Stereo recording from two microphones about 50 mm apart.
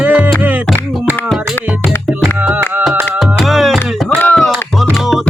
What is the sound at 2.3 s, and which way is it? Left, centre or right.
Music, right.